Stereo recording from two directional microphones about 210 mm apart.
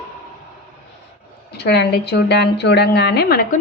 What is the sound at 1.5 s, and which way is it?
A woman's voice, 50° left (ahead or behind).